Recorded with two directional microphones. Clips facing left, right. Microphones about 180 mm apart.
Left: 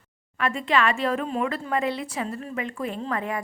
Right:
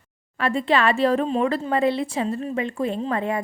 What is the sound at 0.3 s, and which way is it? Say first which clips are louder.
A woman's voice: right 3 dB; 30° right (ahead or behind).